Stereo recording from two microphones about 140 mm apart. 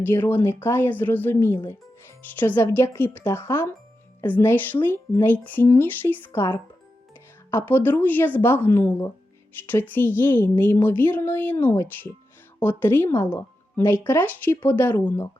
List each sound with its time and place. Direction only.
0.0 s speech: 15° left (ahead or behind)